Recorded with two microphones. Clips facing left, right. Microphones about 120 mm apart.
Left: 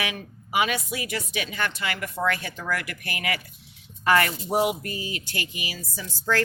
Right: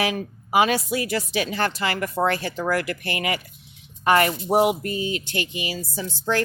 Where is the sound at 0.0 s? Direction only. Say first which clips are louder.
Right 7 dB; 35° right (ahead or behind).